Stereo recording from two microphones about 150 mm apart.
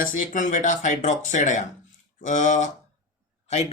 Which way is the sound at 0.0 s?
60° left (ahead or behind).